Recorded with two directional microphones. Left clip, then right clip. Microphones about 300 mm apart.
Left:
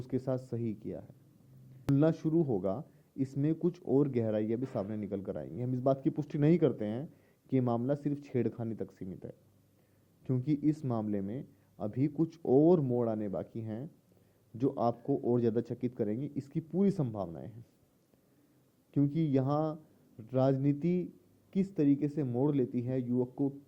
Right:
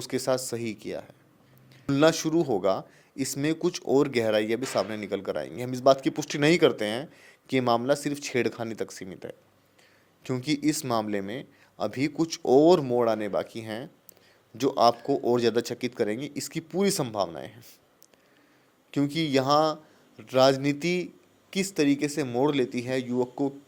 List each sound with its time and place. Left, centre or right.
0.0 s speech: centre
18.9 s speech: centre
23.3 s speech: right